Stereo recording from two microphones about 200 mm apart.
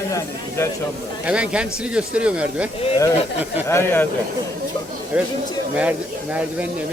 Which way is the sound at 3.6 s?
10° left (ahead or behind).